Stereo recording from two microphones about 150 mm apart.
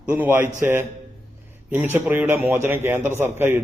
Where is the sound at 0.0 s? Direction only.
10° right (ahead or behind).